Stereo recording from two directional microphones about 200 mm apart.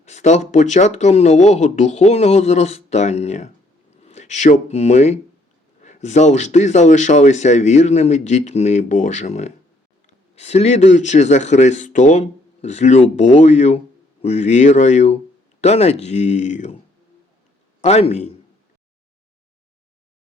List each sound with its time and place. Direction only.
0.0 s speech: 35° left (ahead or behind)
17.8 s speech: 30° left (ahead or behind)